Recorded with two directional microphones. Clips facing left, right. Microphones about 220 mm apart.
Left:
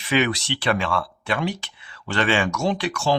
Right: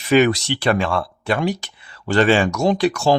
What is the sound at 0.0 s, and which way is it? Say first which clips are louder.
Speech: right 7 dB; 40° right (ahead or behind).